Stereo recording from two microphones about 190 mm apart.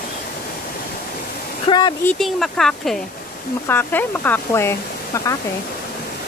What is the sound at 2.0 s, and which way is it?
Speech, centre (ahead or behind).